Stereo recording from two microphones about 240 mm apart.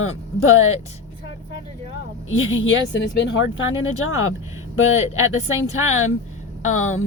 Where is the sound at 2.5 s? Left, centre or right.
Left.